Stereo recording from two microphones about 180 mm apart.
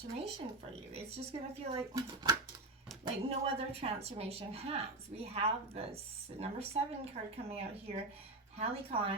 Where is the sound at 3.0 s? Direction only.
35° right (ahead or behind).